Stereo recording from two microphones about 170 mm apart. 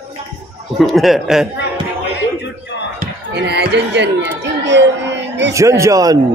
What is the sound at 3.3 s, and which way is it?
Speech, 80° right.